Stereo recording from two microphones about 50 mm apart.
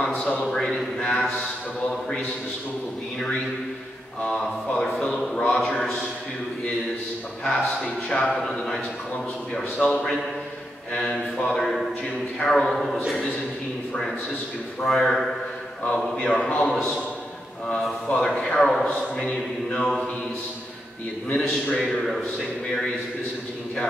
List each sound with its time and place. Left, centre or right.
0.1 s a man's voice: left
0.4 s speech: centre
4.9 s speech: centre
7.4 s speech: centre
12.6 s a man's voice: centre
14.9 s a man's voice: centre
16.2 s a man's voice: left
17.6 s a man's voice: centre
18.9 s speech: centre
21.3 s a man's voice: left